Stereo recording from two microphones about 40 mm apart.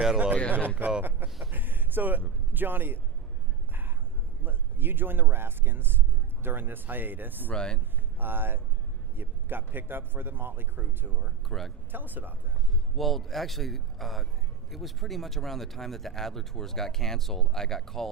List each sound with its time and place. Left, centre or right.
0.8 s speech: right
1.5 s a sound: right
2.5 s a man's voice: right
4.4 s a man's voice: right
7.5 s speech: left
8.2 s a man's voice: right
11.4 s speech: centre
11.9 s speech: right
13.0 s a man's voice: centre